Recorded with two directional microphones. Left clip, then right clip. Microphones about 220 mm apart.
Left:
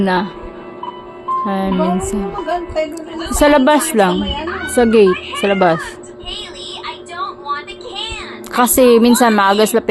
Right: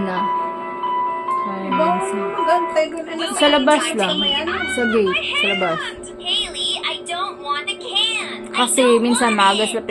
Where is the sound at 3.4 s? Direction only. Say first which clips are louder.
Left 4 dB; 40° left (ahead or behind).